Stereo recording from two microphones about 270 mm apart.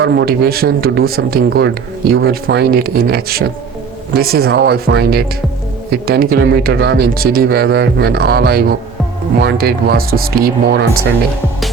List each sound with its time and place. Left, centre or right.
0.0 s speech: right